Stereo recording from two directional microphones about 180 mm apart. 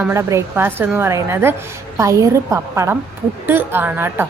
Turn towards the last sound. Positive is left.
turn(degrees=-10)  # may be behind; listen again after turning